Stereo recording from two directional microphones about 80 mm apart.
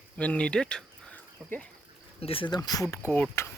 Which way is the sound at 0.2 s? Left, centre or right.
Centre.